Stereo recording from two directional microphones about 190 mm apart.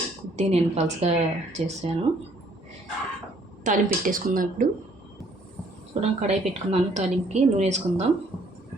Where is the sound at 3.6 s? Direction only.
45° right (ahead or behind).